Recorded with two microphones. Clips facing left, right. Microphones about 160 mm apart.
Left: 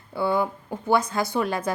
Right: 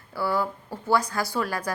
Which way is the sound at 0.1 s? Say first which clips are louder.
Left 3 dB; 20° left (ahead or behind).